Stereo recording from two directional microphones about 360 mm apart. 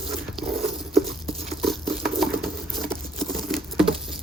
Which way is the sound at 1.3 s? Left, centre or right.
Centre.